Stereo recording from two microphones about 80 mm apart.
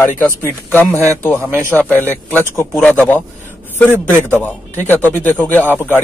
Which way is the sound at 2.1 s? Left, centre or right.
Right.